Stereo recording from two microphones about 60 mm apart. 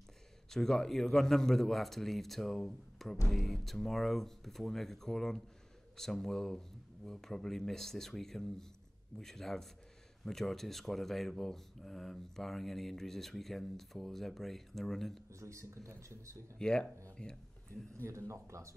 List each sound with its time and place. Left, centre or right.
0.5 s speech: centre
15.3 s speech: right
16.5 s speech: centre
17.9 s speech: right